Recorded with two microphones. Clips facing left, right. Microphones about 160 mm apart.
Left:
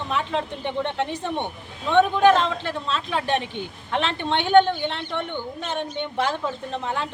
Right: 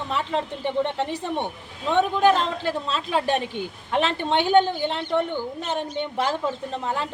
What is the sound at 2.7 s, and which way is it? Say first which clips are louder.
Speech: right 2 dB; 40° right (ahead or behind).